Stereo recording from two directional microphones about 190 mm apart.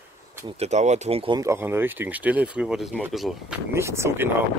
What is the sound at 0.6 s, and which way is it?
Speech, 35° right (ahead or behind).